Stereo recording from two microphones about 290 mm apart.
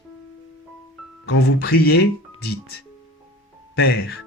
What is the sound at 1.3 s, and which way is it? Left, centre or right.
Speech, left.